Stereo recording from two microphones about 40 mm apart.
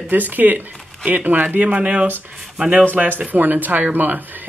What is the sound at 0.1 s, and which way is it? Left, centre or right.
Speech, right.